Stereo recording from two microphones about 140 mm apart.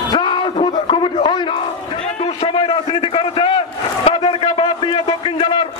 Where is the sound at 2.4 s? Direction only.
40° left (ahead or behind).